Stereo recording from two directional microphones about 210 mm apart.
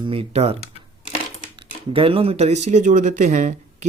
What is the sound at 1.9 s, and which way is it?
Speech, 25° right (ahead or behind).